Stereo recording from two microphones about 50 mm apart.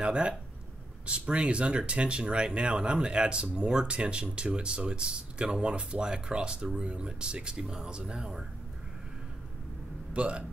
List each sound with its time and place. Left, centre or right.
0.0 s speech: right
10.1 s speech: right